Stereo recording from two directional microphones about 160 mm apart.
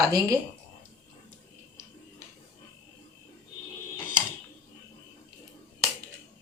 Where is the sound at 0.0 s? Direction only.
20° right (ahead or behind).